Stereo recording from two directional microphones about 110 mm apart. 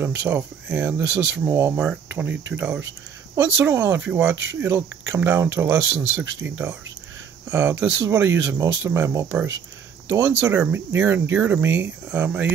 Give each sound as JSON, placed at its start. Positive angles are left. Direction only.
{"t": 0.0, "sound": "speech", "side_deg": -15}
{"t": 1.4, "sound": "speech", "side_deg": -25}
{"t": 1.8, "sound": "speech", "side_deg": -15}